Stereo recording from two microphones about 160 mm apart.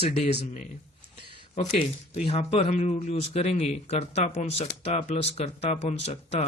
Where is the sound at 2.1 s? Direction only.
40° left (ahead or behind).